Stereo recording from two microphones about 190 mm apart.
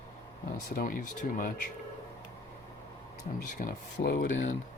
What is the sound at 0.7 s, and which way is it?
Speech, 45° left (ahead or behind).